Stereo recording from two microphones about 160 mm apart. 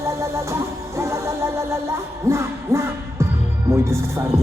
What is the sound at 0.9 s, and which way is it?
Music, 20° right (ahead or behind).